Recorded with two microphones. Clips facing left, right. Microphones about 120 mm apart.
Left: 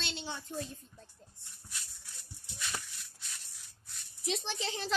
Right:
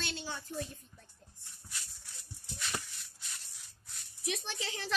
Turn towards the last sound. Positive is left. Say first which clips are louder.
# left 3 dB
turn(degrees=25)  # may be behind; listen again after turning